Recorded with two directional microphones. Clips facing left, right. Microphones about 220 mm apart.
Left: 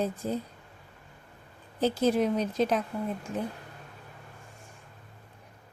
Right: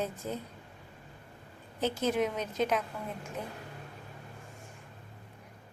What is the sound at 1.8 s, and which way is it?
Speech, 35° left (ahead or behind).